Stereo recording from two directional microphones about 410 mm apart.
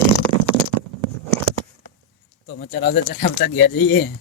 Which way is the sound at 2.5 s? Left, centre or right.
Left.